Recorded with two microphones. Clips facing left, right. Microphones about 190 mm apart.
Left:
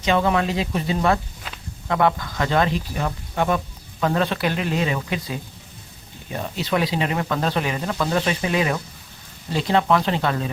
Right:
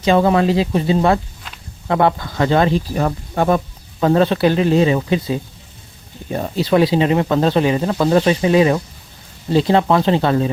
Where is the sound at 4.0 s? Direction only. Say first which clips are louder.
Right 8 dB; 30° right (ahead or behind).